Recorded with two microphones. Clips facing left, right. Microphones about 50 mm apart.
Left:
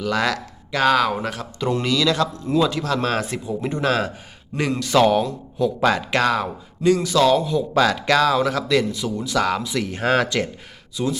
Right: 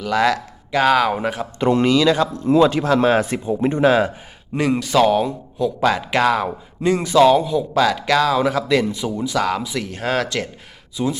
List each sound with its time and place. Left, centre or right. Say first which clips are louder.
0.0 s a man's voice: right 4 dB; centre
1.5 s speech: right 6 dB; right
1.9 s speech: right 4 dB; right
2.5 s speech: right 7 dB; right
3.2 s speech: right 5 dB; right
4.7 s a man's voice: right 1 dB; centre
6.9 s a man's voice: right 5 dB; right
9.4 s speech: left 2 dB; centre
10.9 s a man's voice: right 1 dB; centre